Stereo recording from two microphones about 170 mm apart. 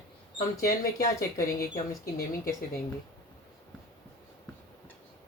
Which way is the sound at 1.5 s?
20° left (ahead or behind).